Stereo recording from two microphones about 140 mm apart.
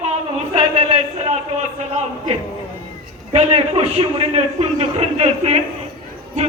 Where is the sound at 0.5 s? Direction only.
50° right (ahead or behind).